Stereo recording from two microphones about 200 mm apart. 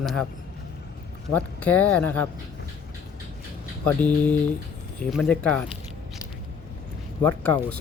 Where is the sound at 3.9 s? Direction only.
10° left (ahead or behind).